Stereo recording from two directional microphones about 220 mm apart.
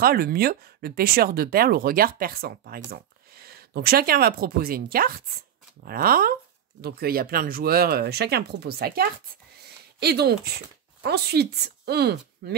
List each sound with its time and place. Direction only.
0.0 s speech: 45° right (ahead or behind)